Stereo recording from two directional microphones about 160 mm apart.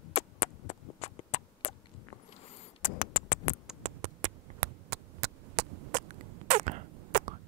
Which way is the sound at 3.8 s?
50° right (ahead or behind).